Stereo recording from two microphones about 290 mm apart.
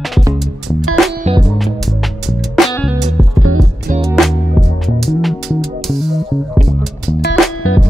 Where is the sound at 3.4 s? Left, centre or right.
Right.